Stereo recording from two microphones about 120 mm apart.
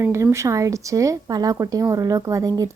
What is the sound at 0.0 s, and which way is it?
Speech, 25° right (ahead or behind).